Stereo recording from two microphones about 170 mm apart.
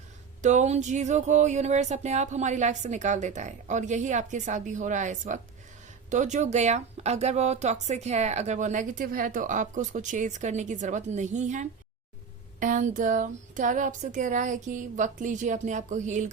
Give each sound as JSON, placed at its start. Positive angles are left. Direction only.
{"t": 0.4, "sound": "speech", "side_deg": -45}